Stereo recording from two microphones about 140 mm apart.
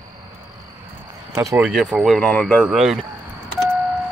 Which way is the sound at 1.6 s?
5° right (ahead or behind).